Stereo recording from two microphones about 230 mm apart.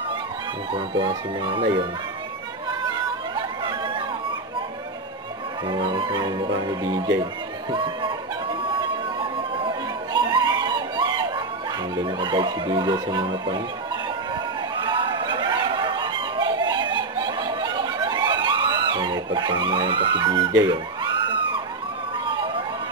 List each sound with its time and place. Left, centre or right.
0.7 s speech: right
3.3 s chatter: right
5.7 s speech: right
8.7 s chatter: right
12.0 s speech: centre
14.9 s a sound: right
20.6 s speech: centre